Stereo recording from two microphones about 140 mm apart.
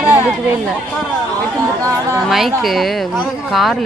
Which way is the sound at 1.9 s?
20° right (ahead or behind).